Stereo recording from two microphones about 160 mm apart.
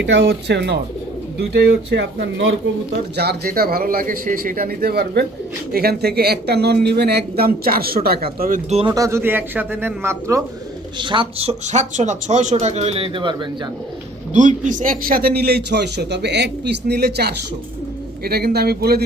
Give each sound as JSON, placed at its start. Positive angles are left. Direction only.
{"t": 0.0, "sound": "a man's voice", "side_deg": -90}
{"t": 3.2, "sound": "speech", "side_deg": -75}
{"t": 8.9, "sound": "speech", "side_deg": -15}
{"t": 10.9, "sound": "speech", "side_deg": -30}
{"t": 14.3, "sound": "a man's voice", "side_deg": -50}
{"t": 18.2, "sound": "speech", "side_deg": -75}